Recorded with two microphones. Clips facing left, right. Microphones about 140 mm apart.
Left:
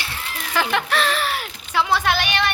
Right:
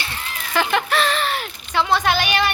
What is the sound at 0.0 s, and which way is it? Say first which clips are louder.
A woman's voice: even; centre (ahead or behind).